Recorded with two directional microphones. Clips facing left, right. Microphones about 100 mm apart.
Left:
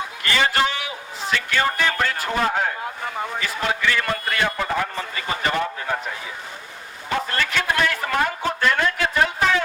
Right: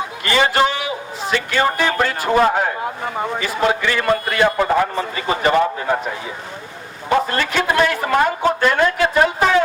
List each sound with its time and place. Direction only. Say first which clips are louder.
0.3 s a sound: right 5 dB; 20° right (ahead or behind)
3.4 s a man's voice: right 5 dB; 20° right (ahead or behind)
7.3 s a man's voice: right 4 dB; 20° right (ahead or behind)